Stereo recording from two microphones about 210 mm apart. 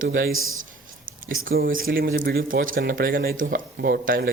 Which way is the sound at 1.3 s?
45° right (ahead or behind).